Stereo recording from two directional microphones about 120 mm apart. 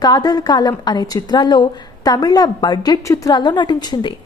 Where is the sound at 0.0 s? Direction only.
35° left (ahead or behind).